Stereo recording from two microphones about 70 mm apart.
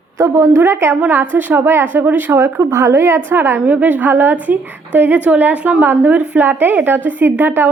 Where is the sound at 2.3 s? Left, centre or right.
Right.